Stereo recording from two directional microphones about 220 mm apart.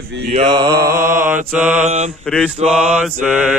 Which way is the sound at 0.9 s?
40° right (ahead or behind).